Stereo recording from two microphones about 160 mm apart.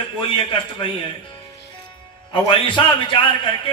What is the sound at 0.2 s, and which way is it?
Speech, 30° left (ahead or behind).